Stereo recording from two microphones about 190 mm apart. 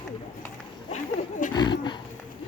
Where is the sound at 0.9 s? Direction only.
45° left (ahead or behind).